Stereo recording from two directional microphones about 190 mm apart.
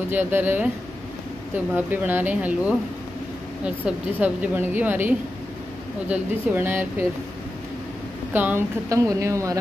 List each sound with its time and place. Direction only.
0.1 s a woman's voice: 10° right (ahead or behind)
1.9 s a woman's voice: 10° right (ahead or behind)
8.3 s a woman's voice: 10° right (ahead or behind)